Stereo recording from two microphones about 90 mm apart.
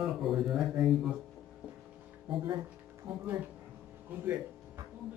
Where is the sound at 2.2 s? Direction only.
60° right (ahead or behind).